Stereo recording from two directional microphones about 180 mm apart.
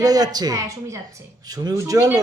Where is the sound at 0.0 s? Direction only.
20° right (ahead or behind).